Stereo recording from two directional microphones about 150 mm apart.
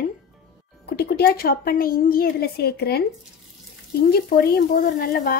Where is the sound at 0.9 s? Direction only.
90° left.